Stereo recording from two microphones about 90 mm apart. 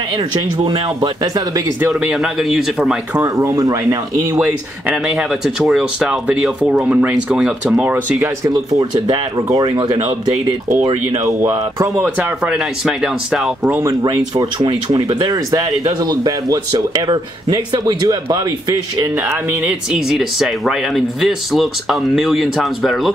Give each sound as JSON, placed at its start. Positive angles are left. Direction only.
{"t": 0.7, "sound": "speech", "side_deg": -90}
{"t": 2.1, "sound": "speech", "side_deg": -5}
{"t": 3.2, "sound": "speech", "side_deg": -35}
{"t": 4.4, "sound": "speech", "side_deg": -15}
{"t": 5.0, "sound": "speech", "side_deg": -5}
{"t": 8.2, "sound": "speech", "side_deg": -35}
{"t": 12.4, "sound": "speech", "side_deg": -5}
{"t": 14.9, "sound": "speech", "side_deg": -45}
{"t": 19.6, "sound": "speech", "side_deg": -5}